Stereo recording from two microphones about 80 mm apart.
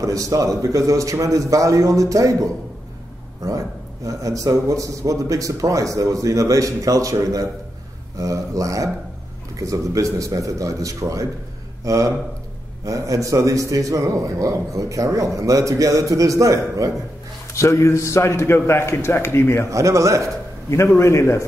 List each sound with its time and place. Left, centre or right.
0.0 s a man's voice: right
17.5 s a man's voice: left
19.7 s speech: right
20.7 s a man's voice: left